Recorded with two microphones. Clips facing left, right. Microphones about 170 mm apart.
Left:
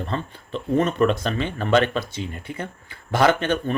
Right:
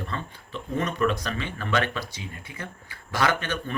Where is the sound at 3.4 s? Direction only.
30° left (ahead or behind).